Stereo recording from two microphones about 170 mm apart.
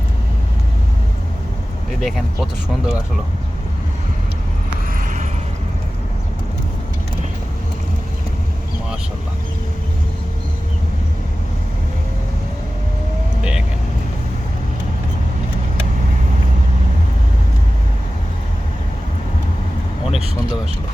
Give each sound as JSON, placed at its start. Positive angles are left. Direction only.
{"t": 2.0, "sound": "speech", "side_deg": 0}
{"t": 4.9, "sound": "a sound", "side_deg": -50}
{"t": 13.4, "sound": "vehicle", "side_deg": -5}